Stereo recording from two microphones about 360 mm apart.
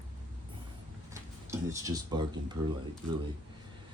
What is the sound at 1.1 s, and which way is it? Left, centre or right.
Speech, centre.